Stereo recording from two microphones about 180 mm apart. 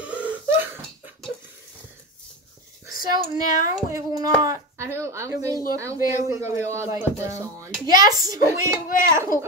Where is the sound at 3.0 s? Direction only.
20° right (ahead or behind).